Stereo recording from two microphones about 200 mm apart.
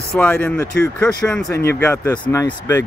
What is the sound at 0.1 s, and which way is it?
Speech, 5° left (ahead or behind).